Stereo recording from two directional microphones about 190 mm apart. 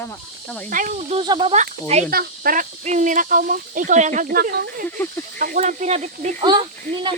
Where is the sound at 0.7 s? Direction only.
45° right (ahead or behind).